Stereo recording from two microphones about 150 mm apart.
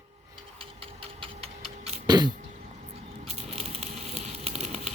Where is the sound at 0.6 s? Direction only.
40° right (ahead or behind).